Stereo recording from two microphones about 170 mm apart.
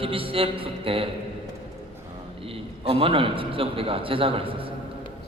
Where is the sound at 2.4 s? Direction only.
35° right (ahead or behind).